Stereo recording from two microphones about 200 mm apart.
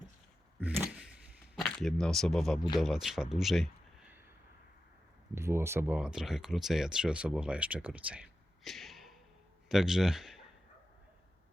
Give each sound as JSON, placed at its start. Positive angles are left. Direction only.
{"t": 1.5, "sound": "speech", "side_deg": 0}
{"t": 3.3, "sound": "a sound", "side_deg": 0}
{"t": 5.3, "sound": "speech", "side_deg": -10}